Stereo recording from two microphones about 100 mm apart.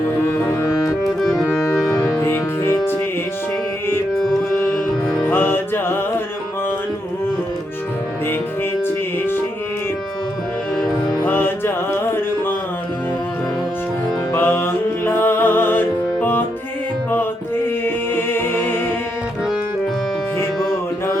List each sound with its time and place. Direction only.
1.0 s music: centre (ahead or behind)
1.8 s music: 25° left (ahead or behind)
4.2 s music: 5° left (ahead or behind)
5.3 s music: 20° left (ahead or behind)
9.1 s music: 20° left (ahead or behind)
11.3 s music: 20° left (ahead or behind)
14.3 s music: 25° left (ahead or behind)
17.8 s a capella: 20° left (ahead or behind)